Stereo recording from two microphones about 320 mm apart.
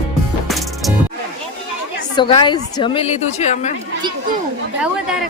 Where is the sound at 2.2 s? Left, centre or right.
Centre.